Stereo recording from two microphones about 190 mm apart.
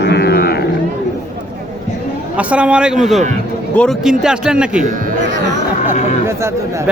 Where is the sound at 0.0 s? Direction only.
60° left (ahead or behind).